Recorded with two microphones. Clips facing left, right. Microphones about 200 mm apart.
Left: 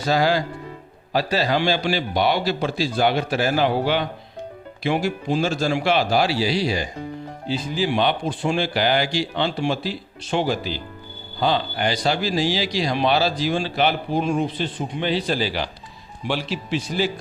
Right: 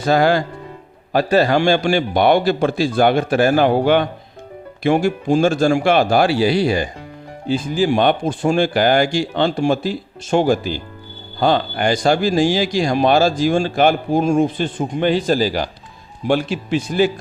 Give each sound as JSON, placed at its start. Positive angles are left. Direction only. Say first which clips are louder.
{"t": 0.0, "sound": "speech", "louder": "right 5 dB", "side_deg": -55}